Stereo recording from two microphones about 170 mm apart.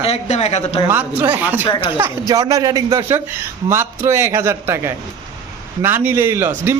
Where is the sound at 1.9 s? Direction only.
15° right (ahead or behind).